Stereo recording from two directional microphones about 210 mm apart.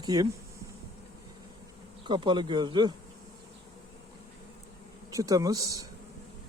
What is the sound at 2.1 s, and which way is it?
Speech, 20° right (ahead or behind).